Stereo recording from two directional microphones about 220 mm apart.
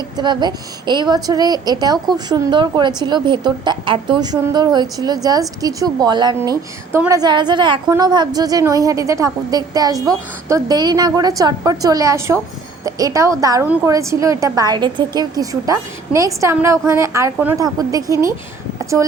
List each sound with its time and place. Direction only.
0.2 s a woman's voice: 20° right (ahead or behind)